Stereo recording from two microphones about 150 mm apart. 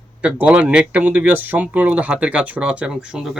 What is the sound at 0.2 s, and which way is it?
Speech, 10° right (ahead or behind).